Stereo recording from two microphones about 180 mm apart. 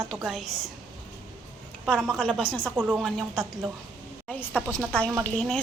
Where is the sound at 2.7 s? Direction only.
5° right (ahead or behind).